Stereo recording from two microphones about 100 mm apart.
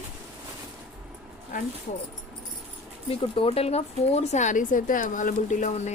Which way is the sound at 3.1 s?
65° left (ahead or behind).